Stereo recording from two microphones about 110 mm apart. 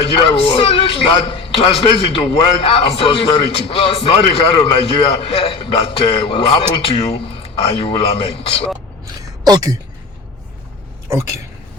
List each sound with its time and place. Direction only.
0.0 s a man's voice: 55° left (ahead or behind)